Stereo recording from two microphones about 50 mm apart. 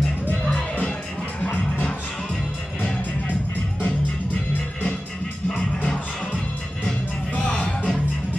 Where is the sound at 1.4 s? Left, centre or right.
Left.